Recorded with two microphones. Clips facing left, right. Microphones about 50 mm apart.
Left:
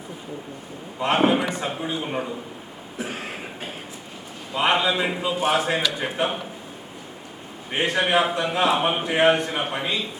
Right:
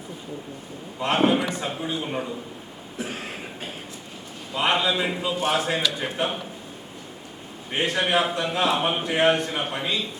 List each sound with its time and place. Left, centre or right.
0.9 s a man's voice: centre
3.0 s a sound: centre
4.5 s a man's voice: centre
7.7 s a man's voice: centre